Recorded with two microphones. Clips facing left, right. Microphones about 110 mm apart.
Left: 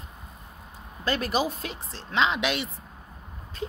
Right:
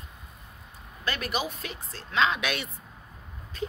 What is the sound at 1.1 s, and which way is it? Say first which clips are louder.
A woman's voice: left 5 dB; 35° left (ahead or behind).